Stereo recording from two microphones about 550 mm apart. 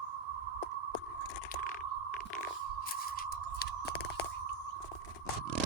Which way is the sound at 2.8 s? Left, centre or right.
Centre.